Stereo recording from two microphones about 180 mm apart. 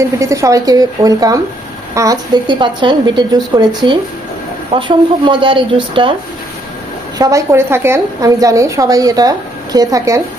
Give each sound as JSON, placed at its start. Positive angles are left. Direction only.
{"t": 0.0, "sound": "a woman's voice", "side_deg": -15}
{"t": 7.2, "sound": "a woman's voice", "side_deg": -20}